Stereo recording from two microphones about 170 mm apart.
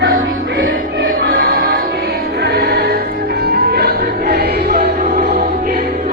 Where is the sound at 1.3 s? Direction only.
60° right (ahead or behind).